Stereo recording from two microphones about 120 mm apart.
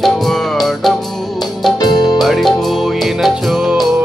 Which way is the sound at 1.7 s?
35° left (ahead or behind).